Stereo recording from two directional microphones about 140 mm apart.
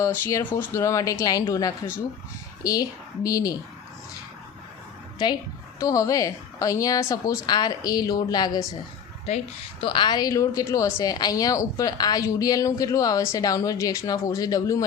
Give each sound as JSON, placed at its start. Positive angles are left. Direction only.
{"t": 0.0, "sound": "a woman's voice", "side_deg": 20}
{"t": 5.2, "sound": "a woman's voice", "side_deg": 35}
{"t": 5.8, "sound": "a woman's voice", "side_deg": 25}
{"t": 9.8, "sound": "a woman's voice", "side_deg": 35}